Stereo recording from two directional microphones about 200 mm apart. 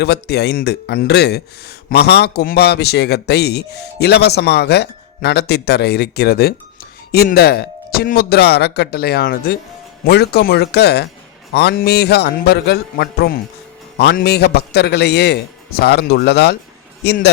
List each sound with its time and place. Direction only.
0.0 s a man's voice: 55° left (ahead or behind)